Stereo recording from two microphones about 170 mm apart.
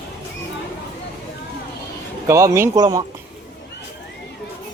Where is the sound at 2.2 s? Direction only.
15° right (ahead or behind).